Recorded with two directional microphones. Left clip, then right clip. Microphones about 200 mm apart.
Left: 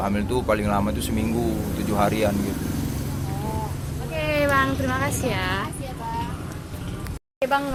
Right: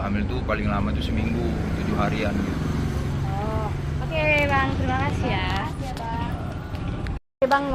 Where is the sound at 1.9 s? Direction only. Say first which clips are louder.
Left 5 dB; 60° left (ahead or behind).